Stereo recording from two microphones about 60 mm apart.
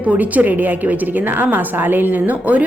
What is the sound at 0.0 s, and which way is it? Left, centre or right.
A woman's voice, right.